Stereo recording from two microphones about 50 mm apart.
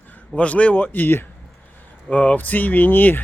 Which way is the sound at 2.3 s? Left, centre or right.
Left.